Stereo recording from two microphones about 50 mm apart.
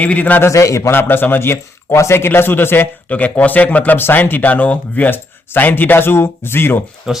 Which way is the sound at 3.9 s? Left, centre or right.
Left.